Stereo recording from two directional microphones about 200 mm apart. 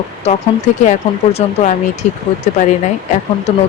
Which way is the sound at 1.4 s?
30° left (ahead or behind).